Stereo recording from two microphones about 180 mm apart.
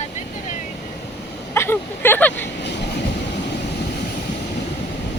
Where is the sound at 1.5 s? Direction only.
10° left (ahead or behind).